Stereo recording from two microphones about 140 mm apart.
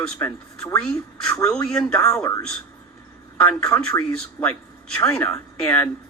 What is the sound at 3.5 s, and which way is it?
Speech, 10° left (ahead or behind).